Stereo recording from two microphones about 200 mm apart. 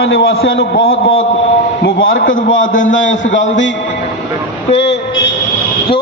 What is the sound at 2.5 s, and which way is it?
A man's voice, 75° left (ahead or behind).